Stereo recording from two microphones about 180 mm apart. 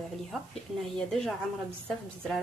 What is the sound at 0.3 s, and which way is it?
Speech, centre (ahead or behind).